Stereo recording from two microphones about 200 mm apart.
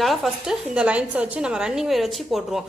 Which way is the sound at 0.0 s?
Centre (ahead or behind).